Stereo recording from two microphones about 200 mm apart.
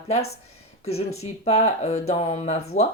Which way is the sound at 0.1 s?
30° left (ahead or behind).